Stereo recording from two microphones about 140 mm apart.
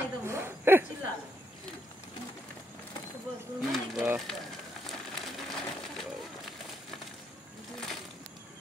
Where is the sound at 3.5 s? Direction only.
Centre (ahead or behind).